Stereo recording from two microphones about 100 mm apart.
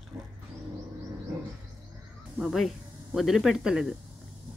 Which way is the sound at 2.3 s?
Centre (ahead or behind).